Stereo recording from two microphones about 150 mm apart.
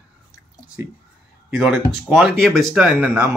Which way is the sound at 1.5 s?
5° right (ahead or behind).